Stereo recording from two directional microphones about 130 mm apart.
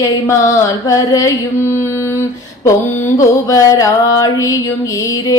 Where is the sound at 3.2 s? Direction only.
25° left (ahead or behind).